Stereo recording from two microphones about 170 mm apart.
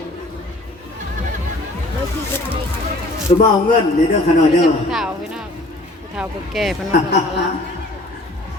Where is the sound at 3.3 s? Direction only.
40° left (ahead or behind).